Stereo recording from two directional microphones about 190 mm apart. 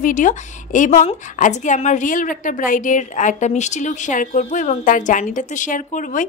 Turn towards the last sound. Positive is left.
turn(degrees=40)  # may be behind; listen again after turning